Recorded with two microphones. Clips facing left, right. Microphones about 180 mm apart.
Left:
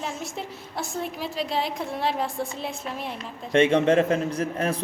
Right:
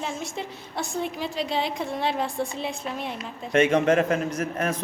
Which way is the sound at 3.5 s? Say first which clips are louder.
Left 1 dB; 30° left (ahead or behind).